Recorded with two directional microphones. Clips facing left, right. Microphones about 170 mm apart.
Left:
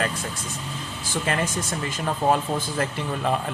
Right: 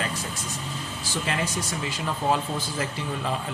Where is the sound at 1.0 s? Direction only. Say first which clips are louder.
Left 3 dB; 50° left (ahead or behind).